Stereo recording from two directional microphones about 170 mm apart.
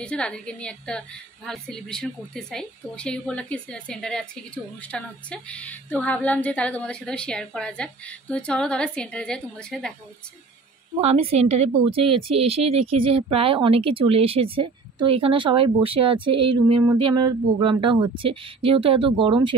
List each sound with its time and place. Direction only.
0.0 s a woman's voice: 5° left (ahead or behind)
11.0 s a woman's voice: 35° right (ahead or behind)